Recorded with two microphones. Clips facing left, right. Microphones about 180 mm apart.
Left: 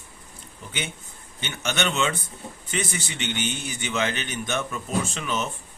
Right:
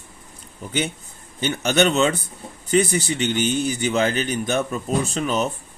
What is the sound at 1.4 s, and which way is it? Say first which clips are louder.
A man's voice: right 9 dB; 35° right (ahead or behind).